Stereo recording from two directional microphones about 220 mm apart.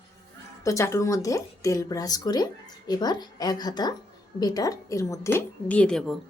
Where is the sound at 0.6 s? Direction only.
15° left (ahead or behind).